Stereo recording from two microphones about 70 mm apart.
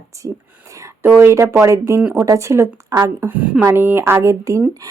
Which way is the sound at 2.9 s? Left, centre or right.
Right.